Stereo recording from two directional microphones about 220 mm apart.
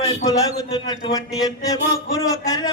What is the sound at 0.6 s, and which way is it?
Music, 15° left (ahead or behind).